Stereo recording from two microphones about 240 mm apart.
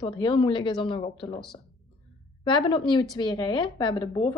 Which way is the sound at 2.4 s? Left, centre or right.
Centre.